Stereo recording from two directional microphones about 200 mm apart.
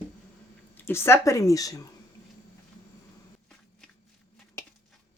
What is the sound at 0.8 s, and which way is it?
Speech, 10° left (ahead or behind).